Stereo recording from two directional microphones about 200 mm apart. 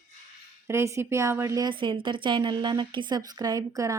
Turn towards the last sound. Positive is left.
turn(degrees=-15)  # may be behind; listen again after turning